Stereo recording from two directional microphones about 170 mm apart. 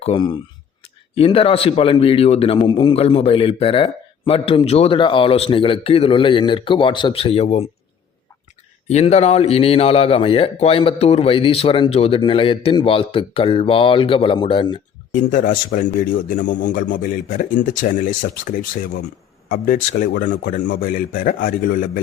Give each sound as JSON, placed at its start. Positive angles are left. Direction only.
{"t": 0.0, "sound": "a man's voice", "side_deg": 30}
{"t": 8.9, "sound": "a man's voice", "side_deg": 40}
{"t": 15.1, "sound": "speech", "side_deg": 50}
{"t": 20.3, "sound": "a man's voice", "side_deg": 80}